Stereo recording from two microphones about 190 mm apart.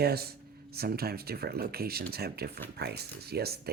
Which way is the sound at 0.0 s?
55° right (ahead or behind).